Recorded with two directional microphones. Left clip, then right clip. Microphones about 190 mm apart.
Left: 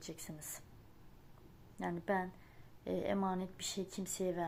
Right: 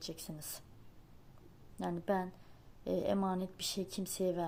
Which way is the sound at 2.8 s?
25° right (ahead or behind).